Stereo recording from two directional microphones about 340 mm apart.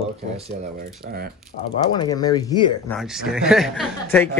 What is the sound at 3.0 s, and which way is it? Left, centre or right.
Speech, centre.